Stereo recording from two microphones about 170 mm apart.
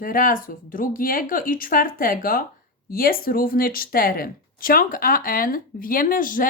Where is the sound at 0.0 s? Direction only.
55° left (ahead or behind).